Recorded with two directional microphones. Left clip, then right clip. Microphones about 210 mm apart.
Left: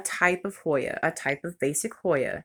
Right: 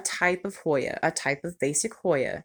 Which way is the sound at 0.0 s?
Centre (ahead or behind).